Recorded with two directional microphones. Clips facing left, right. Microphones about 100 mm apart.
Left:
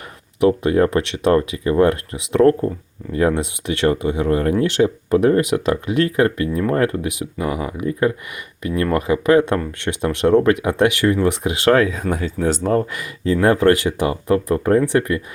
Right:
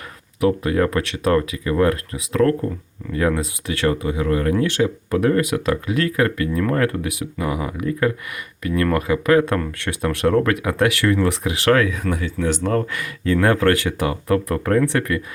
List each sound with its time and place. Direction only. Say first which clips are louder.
0.4 s speech: left 3 dB; 30° left (ahead or behind)
12.6 s speech: left 2 dB; 20° left (ahead or behind)